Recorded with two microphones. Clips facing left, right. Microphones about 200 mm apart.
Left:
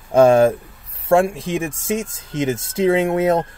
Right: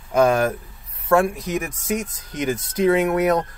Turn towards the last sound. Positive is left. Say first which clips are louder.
# left 2 dB
turn(degrees=25)  # may be behind; listen again after turning